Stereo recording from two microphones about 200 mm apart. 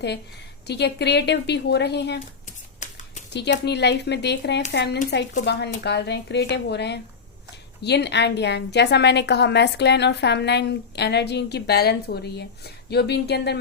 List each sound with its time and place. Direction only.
0.7 s a woman's voice: 55° left (ahead or behind)
2.8 s a sound: 35° left (ahead or behind)
3.3 s a woman's voice: 60° left (ahead or behind)